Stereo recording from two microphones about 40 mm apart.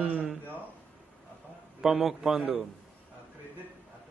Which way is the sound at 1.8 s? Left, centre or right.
Centre.